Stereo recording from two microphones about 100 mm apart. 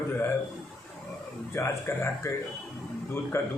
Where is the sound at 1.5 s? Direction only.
25° left (ahead or behind).